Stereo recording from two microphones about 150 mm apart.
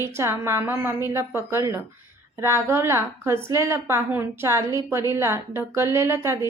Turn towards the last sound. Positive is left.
turn(degrees=-20)  # may be behind; listen again after turning